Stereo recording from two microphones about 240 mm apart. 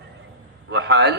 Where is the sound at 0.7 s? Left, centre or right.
Right.